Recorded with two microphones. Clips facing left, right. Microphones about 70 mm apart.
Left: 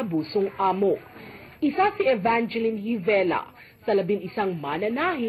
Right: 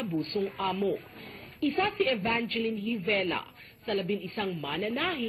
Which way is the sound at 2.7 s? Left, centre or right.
Left.